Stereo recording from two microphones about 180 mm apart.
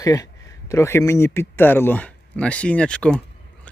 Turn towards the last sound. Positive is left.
turn(degrees=5)  # may be behind; listen again after turning